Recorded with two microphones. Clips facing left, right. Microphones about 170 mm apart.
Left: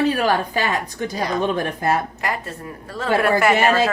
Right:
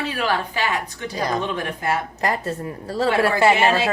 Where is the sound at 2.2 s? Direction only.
35° right (ahead or behind).